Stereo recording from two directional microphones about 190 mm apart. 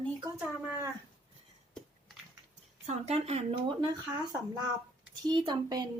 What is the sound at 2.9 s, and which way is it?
Speech, 35° right (ahead or behind).